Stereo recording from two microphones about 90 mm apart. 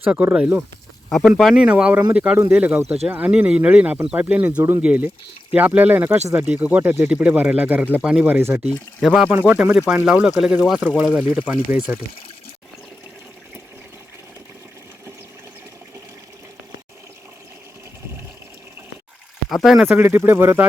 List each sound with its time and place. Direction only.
0.0 s speech: 20° right (ahead or behind)
1.4 s speech: centre (ahead or behind)
1.6 s speech: 15° right (ahead or behind)
9.0 s speech: 5° right (ahead or behind)
9.2 s speech: 15° right (ahead or behind)
19.5 s speech: centre (ahead or behind)
19.9 s speech: 25° right (ahead or behind)